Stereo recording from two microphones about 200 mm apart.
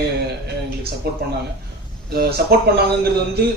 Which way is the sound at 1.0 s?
55° right (ahead or behind).